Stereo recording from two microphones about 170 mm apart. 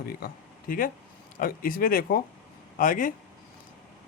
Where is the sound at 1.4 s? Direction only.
55° left (ahead or behind).